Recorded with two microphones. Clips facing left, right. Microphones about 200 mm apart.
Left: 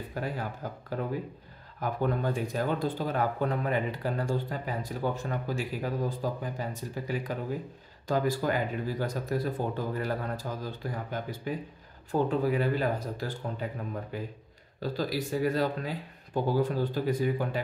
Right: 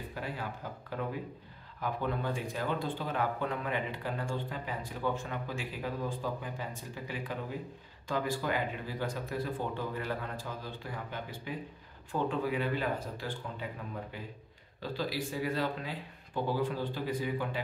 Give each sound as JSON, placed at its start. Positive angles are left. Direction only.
{"t": 0.1, "sound": "speech", "side_deg": 45}